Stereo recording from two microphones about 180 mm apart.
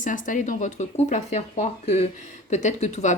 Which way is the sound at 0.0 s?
45° left (ahead or behind).